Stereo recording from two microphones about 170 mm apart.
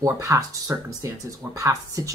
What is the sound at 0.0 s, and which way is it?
Speech, 20° right (ahead or behind).